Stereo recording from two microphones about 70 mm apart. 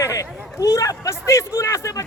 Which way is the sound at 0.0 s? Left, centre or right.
Left.